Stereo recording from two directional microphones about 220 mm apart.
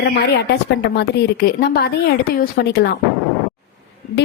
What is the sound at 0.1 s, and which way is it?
Speech, 50° left (ahead or behind).